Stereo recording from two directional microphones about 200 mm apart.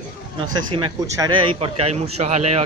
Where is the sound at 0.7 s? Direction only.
25° right (ahead or behind).